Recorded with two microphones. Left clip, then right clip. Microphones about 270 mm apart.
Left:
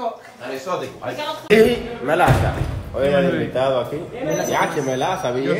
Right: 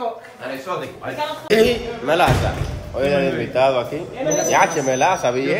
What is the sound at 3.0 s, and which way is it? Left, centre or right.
Speech, centre.